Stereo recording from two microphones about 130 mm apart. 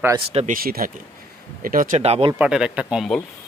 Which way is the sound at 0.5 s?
90° right.